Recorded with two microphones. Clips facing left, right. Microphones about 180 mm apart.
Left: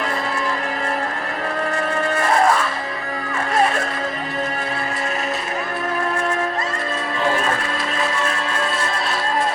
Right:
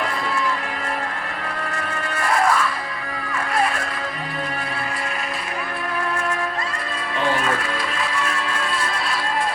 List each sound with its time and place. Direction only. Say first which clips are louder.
2.4 s music: left 1 dB; 30° left (ahead or behind)